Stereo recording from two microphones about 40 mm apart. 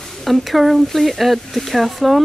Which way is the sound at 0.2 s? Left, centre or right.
Centre.